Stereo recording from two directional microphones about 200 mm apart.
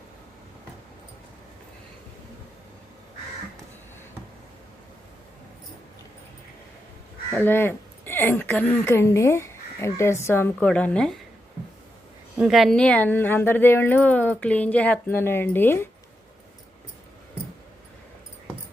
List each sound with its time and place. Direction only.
7.3 s a woman's voice: 10° left (ahead or behind)
12.4 s a woman's voice: centre (ahead or behind)